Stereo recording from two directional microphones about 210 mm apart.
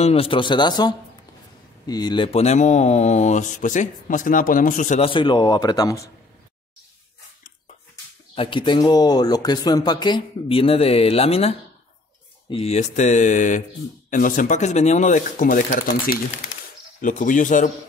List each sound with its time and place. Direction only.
0.0 s speech: 25° left (ahead or behind)
8.4 s speech: 25° left (ahead or behind)
17.0 s speech: 40° left (ahead or behind)